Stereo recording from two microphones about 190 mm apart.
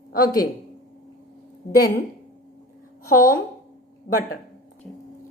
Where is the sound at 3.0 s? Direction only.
50° left (ahead or behind).